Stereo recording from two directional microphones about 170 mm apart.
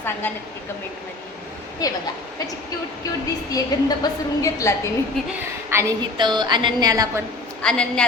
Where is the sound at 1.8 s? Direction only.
20° left (ahead or behind).